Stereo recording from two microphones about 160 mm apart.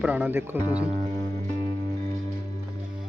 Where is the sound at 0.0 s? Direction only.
5° right (ahead or behind).